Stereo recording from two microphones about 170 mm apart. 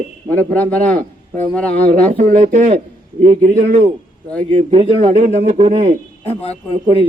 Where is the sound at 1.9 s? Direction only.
50° right (ahead or behind).